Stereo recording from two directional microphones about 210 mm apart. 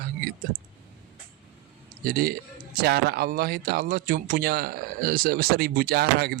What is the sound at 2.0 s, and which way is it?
Speech, 45° right (ahead or behind).